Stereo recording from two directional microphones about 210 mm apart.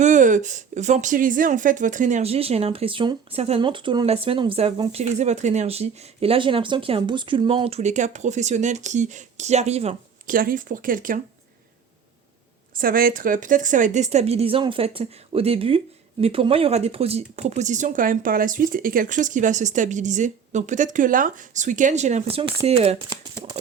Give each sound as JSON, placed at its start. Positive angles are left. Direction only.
{"t": 0.0, "sound": "speech", "side_deg": -35}
{"t": 10.3, "sound": "speech", "side_deg": -40}
{"t": 12.8, "sound": "speech", "side_deg": -45}
{"t": 23.0, "sound": "speech", "side_deg": -20}